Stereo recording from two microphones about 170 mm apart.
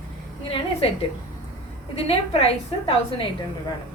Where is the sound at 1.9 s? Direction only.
35° left (ahead or behind).